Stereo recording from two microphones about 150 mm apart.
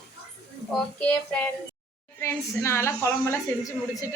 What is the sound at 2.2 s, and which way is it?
A woman's voice, 20° left (ahead or behind).